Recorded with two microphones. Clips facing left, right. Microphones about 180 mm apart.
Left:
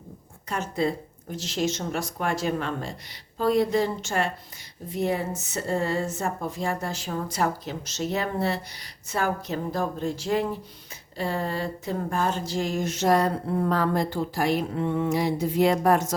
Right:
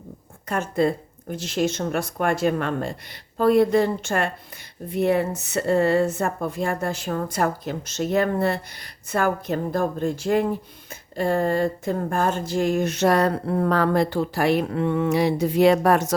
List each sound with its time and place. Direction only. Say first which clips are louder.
0.4 s a woman's voice: right 5 dB; 55° right (ahead or behind); by 16.1 s 75° right (ahead or behind)